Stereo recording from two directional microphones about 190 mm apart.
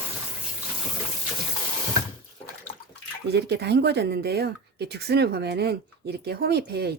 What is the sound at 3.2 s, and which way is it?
Speech, 60° right (ahead or behind).